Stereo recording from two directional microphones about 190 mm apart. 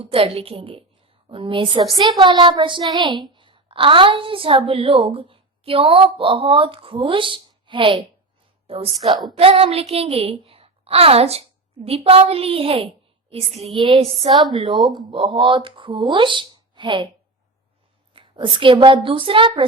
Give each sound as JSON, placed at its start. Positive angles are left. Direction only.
{"t": 0.0, "sound": "a woman's voice", "side_deg": -30}
{"t": 18.1, "sound": "a woman's voice", "side_deg": -25}